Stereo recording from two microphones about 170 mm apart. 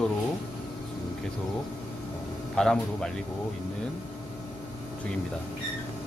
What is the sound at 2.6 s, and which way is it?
Speech, 5° left (ahead or behind).